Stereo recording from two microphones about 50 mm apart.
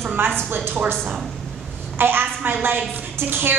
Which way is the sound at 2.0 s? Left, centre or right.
Right.